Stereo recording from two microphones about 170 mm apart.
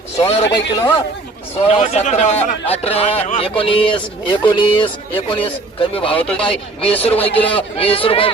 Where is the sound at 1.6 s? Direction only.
35° left (ahead or behind).